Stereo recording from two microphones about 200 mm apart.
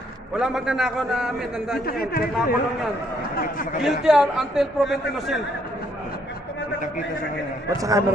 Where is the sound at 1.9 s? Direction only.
50° left (ahead or behind).